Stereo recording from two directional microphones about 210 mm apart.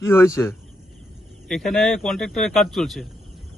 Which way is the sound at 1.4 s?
Centre (ahead or behind).